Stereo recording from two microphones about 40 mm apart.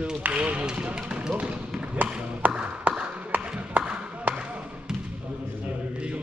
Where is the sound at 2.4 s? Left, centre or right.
Right.